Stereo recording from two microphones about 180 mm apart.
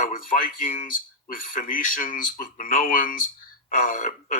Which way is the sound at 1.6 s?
50° left (ahead or behind).